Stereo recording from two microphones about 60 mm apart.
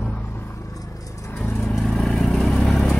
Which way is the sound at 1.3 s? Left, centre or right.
Left.